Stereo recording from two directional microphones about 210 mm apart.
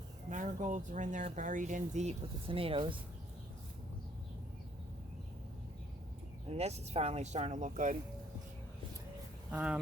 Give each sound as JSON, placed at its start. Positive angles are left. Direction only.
{"t": 0.3, "sound": "speech", "side_deg": -35}
{"t": 6.5, "sound": "speech", "side_deg": -30}
{"t": 9.5, "sound": "speech", "side_deg": -5}